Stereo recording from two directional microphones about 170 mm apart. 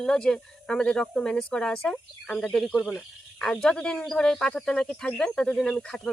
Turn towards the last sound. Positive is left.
turn(degrees=5)  # may be behind; listen again after turning